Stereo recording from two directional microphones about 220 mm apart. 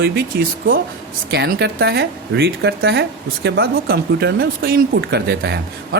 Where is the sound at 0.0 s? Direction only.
45° right (ahead or behind).